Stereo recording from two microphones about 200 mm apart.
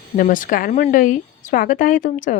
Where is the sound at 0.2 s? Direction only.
40° left (ahead or behind).